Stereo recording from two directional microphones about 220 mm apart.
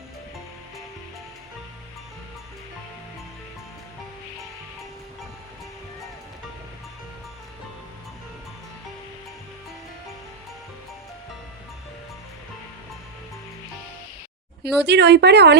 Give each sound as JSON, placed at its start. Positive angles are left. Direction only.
{"t": 14.6, "sound": "speech", "side_deg": -50}